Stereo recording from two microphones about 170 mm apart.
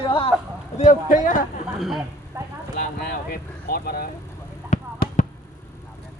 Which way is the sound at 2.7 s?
65° left (ahead or behind).